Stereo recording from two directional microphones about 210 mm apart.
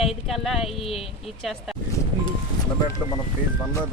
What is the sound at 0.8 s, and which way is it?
Speech, 25° left (ahead or behind).